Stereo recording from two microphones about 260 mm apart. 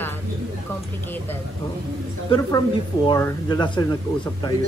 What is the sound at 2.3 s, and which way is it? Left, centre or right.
Speech, centre.